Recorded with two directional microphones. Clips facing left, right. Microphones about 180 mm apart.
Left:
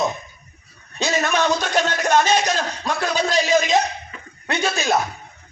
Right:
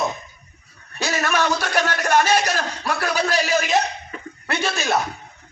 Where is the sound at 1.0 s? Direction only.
20° left (ahead or behind).